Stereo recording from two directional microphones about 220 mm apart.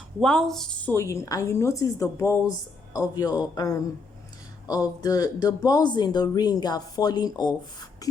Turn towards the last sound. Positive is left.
turn(degrees=15)  # may be behind; listen again after turning